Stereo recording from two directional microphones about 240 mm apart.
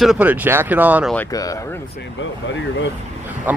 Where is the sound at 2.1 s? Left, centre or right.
Left.